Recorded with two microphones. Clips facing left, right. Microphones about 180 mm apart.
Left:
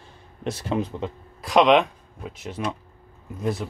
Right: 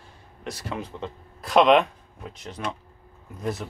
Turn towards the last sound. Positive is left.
turn(degrees=0)  # may be behind; listen again after turning